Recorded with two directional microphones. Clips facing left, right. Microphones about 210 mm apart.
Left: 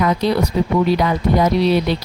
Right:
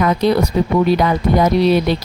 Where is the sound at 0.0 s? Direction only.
50° right (ahead or behind).